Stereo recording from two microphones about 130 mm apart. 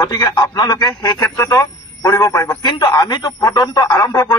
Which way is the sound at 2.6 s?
35° left (ahead or behind).